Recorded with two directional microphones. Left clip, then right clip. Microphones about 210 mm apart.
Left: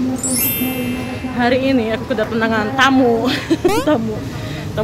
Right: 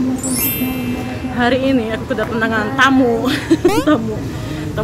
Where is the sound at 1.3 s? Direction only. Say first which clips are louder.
Even; 15° left (ahead or behind).